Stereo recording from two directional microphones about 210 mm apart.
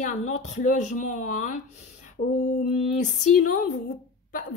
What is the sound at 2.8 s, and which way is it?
Speech, 35° left (ahead or behind).